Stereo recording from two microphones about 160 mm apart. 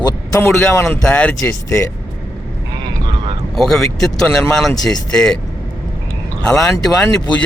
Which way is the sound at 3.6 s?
Centre (ahead or behind).